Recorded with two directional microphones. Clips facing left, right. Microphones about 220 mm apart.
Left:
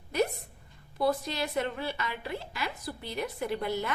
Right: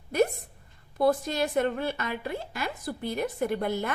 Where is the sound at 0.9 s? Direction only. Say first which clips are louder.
Right 4 dB; 50° right (ahead or behind).